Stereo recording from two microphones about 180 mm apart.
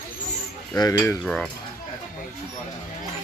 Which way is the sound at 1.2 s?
5° left (ahead or behind).